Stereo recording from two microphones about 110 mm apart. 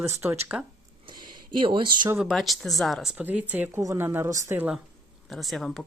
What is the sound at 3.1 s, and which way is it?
Speech, 15° right (ahead or behind).